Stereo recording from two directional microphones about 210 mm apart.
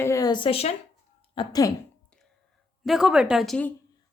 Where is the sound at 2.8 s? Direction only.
Centre (ahead or behind).